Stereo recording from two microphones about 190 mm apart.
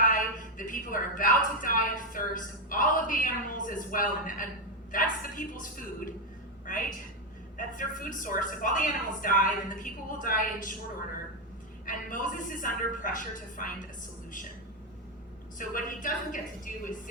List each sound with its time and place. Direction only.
0.0 s a sound: 45° left (ahead or behind)
7.5 s a woman's voice: 45° left (ahead or behind)
11.9 s a woman's voice: 45° left (ahead or behind)
15.5 s a woman's voice: 45° left (ahead or behind)